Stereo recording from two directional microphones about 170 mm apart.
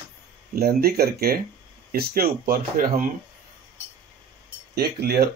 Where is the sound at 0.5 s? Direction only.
65° right (ahead or behind).